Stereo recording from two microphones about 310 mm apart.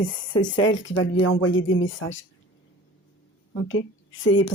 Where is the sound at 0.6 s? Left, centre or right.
Left.